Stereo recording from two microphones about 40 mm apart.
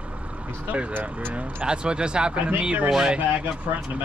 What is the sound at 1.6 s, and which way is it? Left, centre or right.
Speech, right.